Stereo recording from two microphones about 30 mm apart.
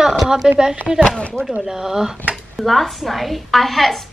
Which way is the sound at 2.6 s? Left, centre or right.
Centre.